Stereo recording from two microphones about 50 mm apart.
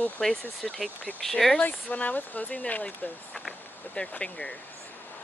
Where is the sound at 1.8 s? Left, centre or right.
Left.